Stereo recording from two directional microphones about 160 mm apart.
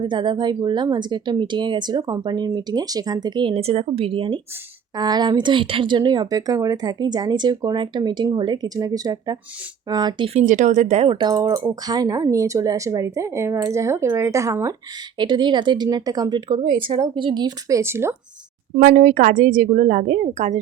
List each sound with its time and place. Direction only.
0.0 s speech: 30° right (ahead or behind)
10.4 s speech: 50° right (ahead or behind); by 18.2 s 15° right (ahead or behind)
18.8 s a woman's voice: 60° right (ahead or behind)